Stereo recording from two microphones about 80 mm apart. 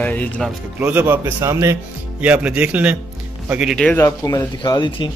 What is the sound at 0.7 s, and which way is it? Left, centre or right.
Speech, right.